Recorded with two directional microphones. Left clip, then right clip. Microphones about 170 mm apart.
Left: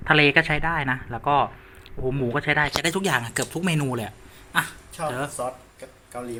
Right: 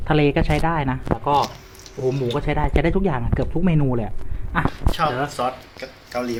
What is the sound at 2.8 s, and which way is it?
Speech, 5° left (ahead or behind).